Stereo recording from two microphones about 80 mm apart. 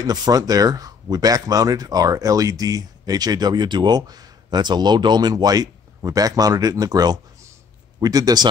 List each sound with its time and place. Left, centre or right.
0.0 s speech: right